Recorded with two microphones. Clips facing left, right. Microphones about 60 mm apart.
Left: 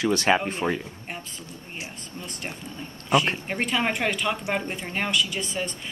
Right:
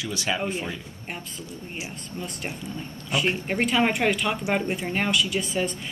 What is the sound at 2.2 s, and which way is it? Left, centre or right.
A woman's voice, centre.